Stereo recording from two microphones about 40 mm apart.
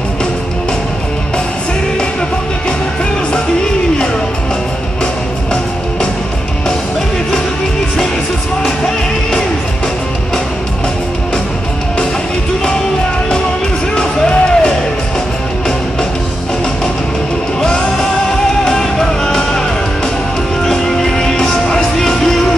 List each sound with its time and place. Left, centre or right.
13.9 s music: left
17.6 s music: centre
20.6 s music: centre